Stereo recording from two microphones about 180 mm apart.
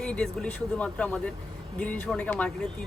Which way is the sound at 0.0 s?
5° left (ahead or behind).